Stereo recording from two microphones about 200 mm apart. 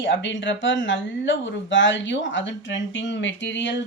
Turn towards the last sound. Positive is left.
turn(degrees=65)  # may be behind; listen again after turning